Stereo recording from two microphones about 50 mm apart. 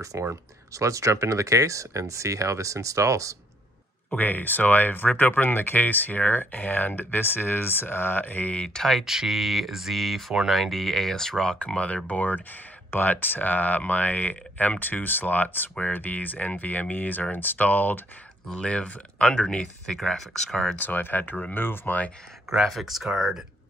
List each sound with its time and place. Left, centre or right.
0.3 s speech: right
4.1 s speech: left
8.6 s speech: centre
8.9 s speech: centre
11.5 s speech: left
18.5 s speech: left
20.0 s speech: centre
20.7 s speech: left
21.5 s speech: left
22.6 s speech: centre